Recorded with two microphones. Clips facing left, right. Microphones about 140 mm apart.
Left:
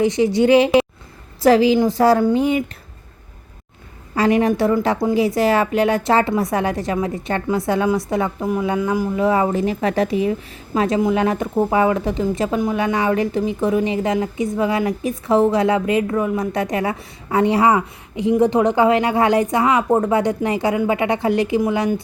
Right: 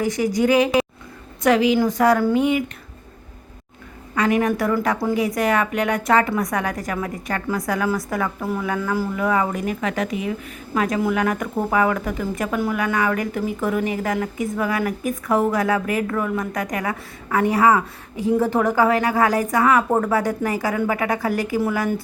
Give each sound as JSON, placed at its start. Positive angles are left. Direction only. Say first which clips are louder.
{"t": 0.0, "sound": "a woman's voice", "louder": "left 4 dB", "side_deg": 25}
{"t": 4.1, "sound": "a woman's voice", "louder": "left 3 dB", "side_deg": 30}